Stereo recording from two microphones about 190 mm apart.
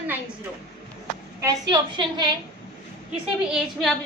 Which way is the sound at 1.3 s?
20° right (ahead or behind).